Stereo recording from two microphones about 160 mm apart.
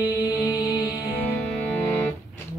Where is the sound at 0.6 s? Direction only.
25° left (ahead or behind).